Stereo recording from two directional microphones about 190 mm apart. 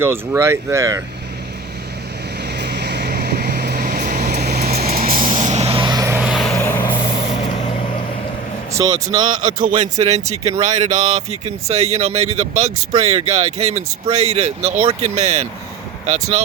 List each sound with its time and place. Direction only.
0.0 s speech: 15° right (ahead or behind)
2.6 s vehicle: 60° right (ahead or behind); by 5.6 s 40° right (ahead or behind)
5.6 s vehicle: 20° right (ahead or behind)
6.2 s vehicle: centre (ahead or behind)
6.6 s vehicle: 15° left (ahead or behind)
8.7 s speech: 20° right (ahead or behind)
9.8 s speech: 35° right (ahead or behind)